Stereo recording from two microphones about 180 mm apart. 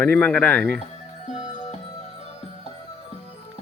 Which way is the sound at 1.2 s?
40° left (ahead or behind).